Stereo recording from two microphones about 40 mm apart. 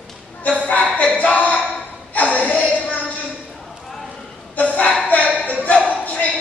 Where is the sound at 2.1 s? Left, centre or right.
Left.